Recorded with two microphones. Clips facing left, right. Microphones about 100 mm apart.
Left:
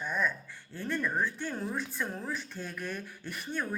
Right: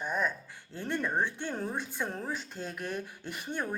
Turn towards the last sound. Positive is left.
turn(degrees=-20)  # may be behind; listen again after turning